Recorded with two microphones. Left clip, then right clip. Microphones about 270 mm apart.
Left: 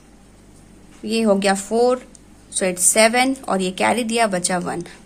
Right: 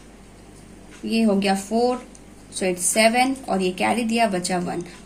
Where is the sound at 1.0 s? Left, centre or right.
Left.